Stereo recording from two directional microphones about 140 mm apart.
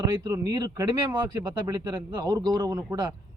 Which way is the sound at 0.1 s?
30° right (ahead or behind).